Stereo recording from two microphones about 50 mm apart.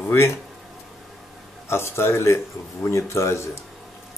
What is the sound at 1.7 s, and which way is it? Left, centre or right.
Speech, left.